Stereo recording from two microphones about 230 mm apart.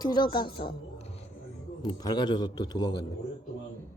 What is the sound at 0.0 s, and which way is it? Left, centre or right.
A woman's voice, centre.